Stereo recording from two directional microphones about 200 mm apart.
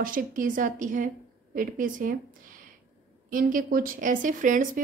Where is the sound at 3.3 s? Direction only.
45° right (ahead or behind).